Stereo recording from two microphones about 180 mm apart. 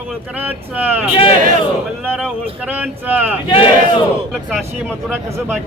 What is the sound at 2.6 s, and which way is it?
Speech, 10° right (ahead or behind).